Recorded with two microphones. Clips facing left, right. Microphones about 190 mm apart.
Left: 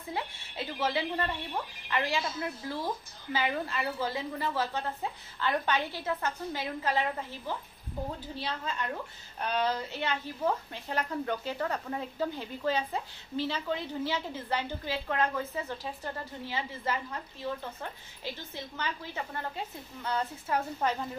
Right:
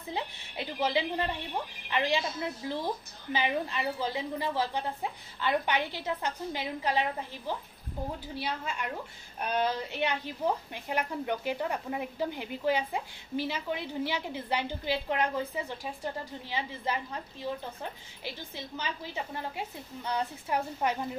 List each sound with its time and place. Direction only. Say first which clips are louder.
0.1 s a sound: right 1 dB; 15° right (ahead or behind)
1.9 s a woman's voice: right 2 dB; 20° right (ahead or behind)
18.2 s a woman's voice: left 1 dB; 15° right (ahead or behind)